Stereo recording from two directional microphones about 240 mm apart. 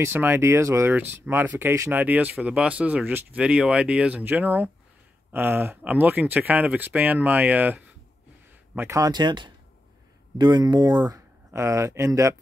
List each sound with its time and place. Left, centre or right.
0.0 s speech: centre